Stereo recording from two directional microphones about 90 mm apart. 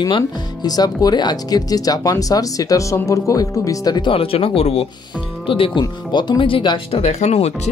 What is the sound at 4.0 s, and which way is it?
Speech, 80° left.